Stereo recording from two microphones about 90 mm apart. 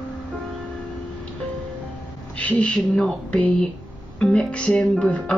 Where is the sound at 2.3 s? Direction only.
15° left (ahead or behind).